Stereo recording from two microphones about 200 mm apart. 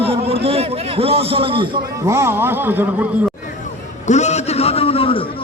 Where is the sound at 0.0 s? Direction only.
30° right (ahead or behind).